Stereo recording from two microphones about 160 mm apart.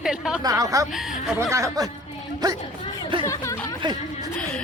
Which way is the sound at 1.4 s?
20° right (ahead or behind).